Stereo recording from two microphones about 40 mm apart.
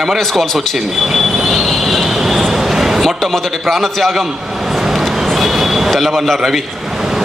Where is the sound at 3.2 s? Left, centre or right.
Centre.